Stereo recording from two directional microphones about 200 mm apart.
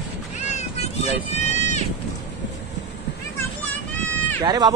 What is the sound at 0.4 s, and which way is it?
Cat, 35° left (ahead or behind).